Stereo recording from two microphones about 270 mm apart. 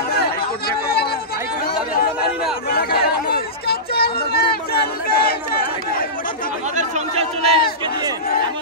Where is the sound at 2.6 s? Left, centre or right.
Left.